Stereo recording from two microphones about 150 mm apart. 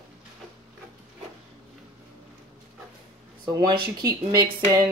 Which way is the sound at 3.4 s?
30° right (ahead or behind).